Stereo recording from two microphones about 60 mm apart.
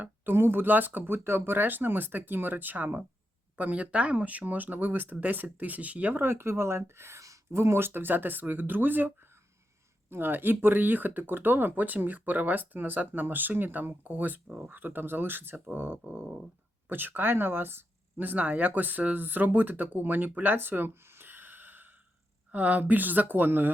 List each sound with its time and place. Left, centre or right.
0.0 s speech: right
6.1 s speech: right